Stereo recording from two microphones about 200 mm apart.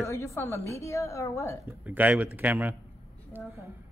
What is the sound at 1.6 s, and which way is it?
A man's voice, 10° right (ahead or behind).